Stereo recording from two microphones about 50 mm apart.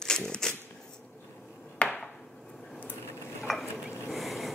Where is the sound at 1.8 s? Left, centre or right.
Left.